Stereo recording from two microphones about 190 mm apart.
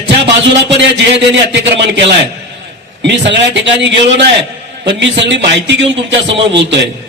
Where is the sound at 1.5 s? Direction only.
65° right (ahead or behind).